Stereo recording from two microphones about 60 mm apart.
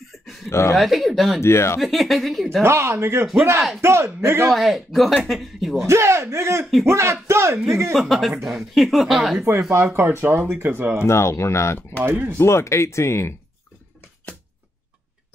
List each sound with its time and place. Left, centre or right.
0.5 s speech: left
0.7 s speech: centre
1.4 s speech: left
1.8 s speech: centre
2.6 s speech: right
4.5 s speech: centre
5.8 s speech: right
7.9 s speech: centre
9.6 s speech: right
9.9 s speech: right
11.1 s speech: left
12.0 s speech: right
12.4 s speech: left